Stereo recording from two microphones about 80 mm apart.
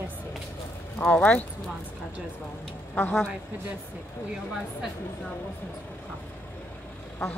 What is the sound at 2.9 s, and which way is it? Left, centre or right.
Speech, left.